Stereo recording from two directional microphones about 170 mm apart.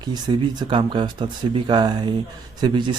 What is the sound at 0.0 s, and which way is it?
Speech, 25° right (ahead or behind).